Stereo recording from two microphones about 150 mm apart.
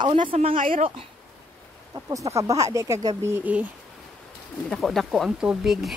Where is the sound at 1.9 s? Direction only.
20° right (ahead or behind).